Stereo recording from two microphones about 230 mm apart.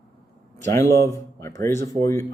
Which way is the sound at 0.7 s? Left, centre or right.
Centre.